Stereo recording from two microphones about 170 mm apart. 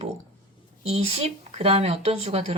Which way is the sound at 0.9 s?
35° right (ahead or behind).